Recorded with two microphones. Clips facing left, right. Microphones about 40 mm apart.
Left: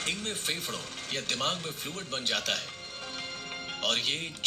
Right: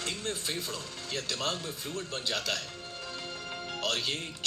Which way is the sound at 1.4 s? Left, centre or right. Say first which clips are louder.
Left 1 dB; left.